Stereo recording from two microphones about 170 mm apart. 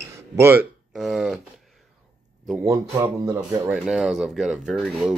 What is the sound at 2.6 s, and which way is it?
Speech, 20° right (ahead or behind).